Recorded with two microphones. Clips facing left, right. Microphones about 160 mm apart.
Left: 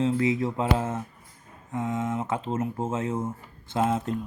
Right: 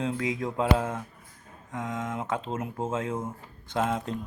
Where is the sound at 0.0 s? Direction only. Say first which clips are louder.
Left 5 dB; 5° left (ahead or behind).